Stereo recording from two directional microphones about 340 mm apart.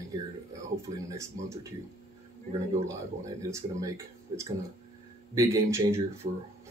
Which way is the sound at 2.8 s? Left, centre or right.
Centre.